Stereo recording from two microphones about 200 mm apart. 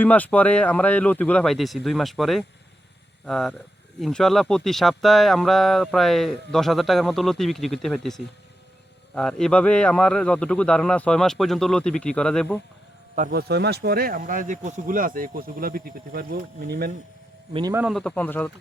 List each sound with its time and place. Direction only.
0.0 s speech: 5° left (ahead or behind)
13.1 s speech: 40° right (ahead or behind)
13.5 s speech: 55° right (ahead or behind)
17.5 s a man's voice: 20° right (ahead or behind)
17.7 s speech: centre (ahead or behind)